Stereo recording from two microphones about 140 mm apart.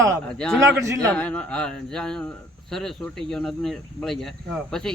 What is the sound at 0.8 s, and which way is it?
Speech, 20° right (ahead or behind).